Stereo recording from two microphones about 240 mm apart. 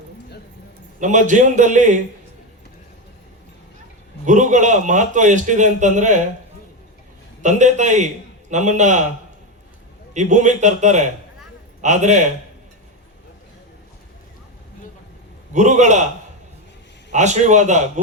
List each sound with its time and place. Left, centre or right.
0.9 s a man's voice: right
4.3 s a man's voice: right
7.4 s a man's voice: right
10.2 s a man's voice: right
15.5 s a man's voice: right
17.1 s a man's voice: right